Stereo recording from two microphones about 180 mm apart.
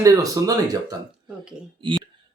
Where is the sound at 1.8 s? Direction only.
25° right (ahead or behind).